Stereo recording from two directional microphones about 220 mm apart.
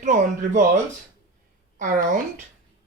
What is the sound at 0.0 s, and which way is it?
Speech, 35° right (ahead or behind).